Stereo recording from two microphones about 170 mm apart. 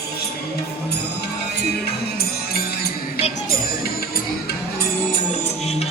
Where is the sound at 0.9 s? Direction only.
70° left (ahead or behind).